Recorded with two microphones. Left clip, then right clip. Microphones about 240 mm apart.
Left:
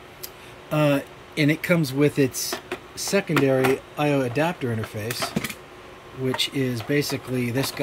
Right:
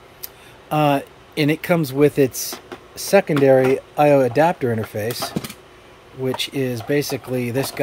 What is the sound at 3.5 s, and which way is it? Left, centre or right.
Speech, right.